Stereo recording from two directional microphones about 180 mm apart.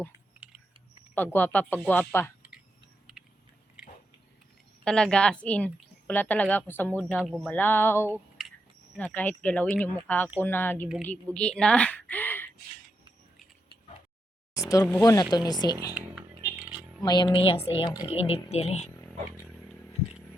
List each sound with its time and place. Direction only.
0.3 s typing: 5° right (ahead or behind)
1.1 s a woman's voice: 10° left (ahead or behind)
3.2 s biting: 5° right (ahead or behind)
4.9 s a woman's voice: 5° left (ahead or behind)
7.2 s a woman's voice: 5° right (ahead or behind); by 8.1 s 15° left (ahead or behind)
8.1 s a sound: centre (ahead or behind)
9.0 s a woman's voice: 10° left (ahead or behind)
14.5 s a sound: 20° left (ahead or behind)
15.0 s speech: 20° left (ahead or behind)
16.4 s a sound: 10° right (ahead or behind)
17.0 s speech: 25° left (ahead or behind)